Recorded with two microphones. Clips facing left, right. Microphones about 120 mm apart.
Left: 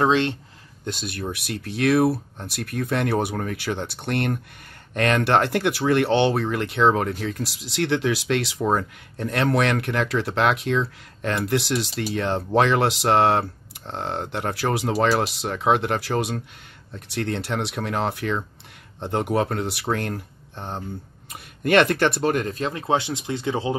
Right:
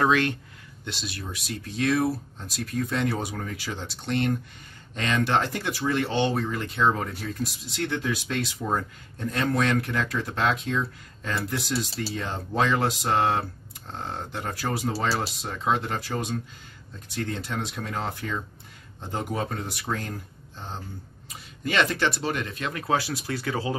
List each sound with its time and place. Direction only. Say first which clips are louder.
0.0 s speech: left 3 dB; 25° left (ahead or behind)
0.8 s speech: left 6 dB; 50° left (ahead or behind); by 7.2 s 75° left (ahead or behind)
7.2 s speech: left 3 dB; 85° left; by 23.8 s 25° left (ahead or behind)